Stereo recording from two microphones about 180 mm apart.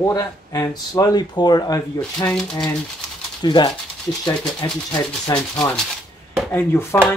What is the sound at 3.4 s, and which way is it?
Speech, 25° left (ahead or behind).